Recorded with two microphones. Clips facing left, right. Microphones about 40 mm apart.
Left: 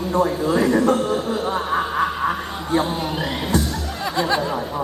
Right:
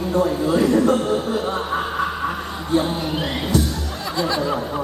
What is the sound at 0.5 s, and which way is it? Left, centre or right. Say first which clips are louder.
Speech: right 1 dB; centre.